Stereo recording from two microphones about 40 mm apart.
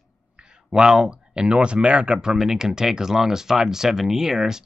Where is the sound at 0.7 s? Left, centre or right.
Centre.